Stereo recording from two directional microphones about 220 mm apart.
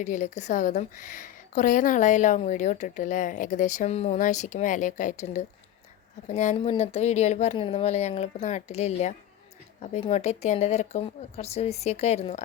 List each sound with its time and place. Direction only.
0.0 s a woman's voice: 35° left (ahead or behind)